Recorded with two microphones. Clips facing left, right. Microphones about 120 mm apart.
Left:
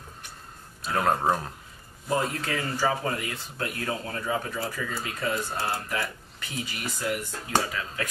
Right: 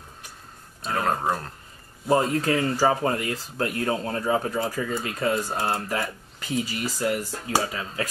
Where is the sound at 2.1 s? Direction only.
35° right (ahead or behind).